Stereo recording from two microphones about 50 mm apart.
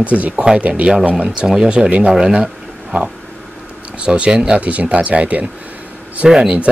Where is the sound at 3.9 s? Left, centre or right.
Right.